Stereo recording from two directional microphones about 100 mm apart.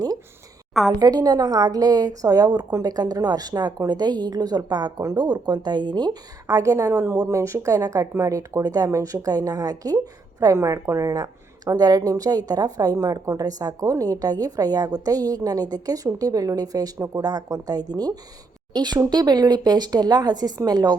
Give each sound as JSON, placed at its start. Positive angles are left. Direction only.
{"t": 0.7, "sound": "a woman's voice", "side_deg": 0}
{"t": 0.9, "sound": "a woman's voice", "side_deg": -40}
{"t": 6.5, "sound": "a woman's voice", "side_deg": -35}